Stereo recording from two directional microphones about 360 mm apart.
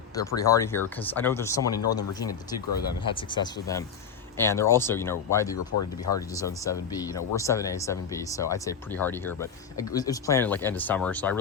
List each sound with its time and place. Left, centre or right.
0.2 s speech: centre
5.5 s speech: left
6.1 s speech: centre